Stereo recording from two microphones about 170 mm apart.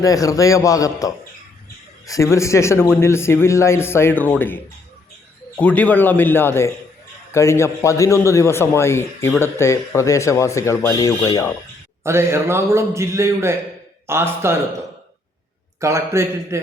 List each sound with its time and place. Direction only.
0.0 s a man's voice: 20° left (ahead or behind)
12.0 s a man's voice: 15° right (ahead or behind)
15.8 s a man's voice: 15° right (ahead or behind)